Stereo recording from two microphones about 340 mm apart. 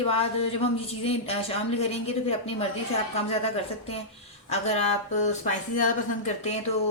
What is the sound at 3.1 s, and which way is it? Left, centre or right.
Speech, centre.